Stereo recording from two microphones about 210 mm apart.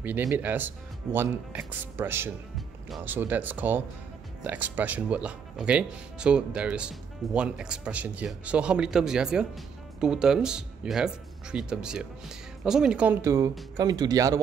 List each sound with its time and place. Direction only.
0.0 s speech: 10° right (ahead or behind)